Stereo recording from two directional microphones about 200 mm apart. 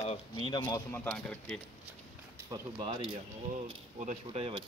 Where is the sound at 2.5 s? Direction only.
20° right (ahead or behind).